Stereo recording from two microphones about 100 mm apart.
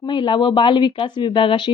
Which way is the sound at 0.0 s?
50° left (ahead or behind).